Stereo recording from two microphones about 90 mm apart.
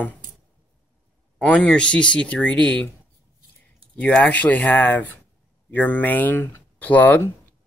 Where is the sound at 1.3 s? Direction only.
15° left (ahead or behind).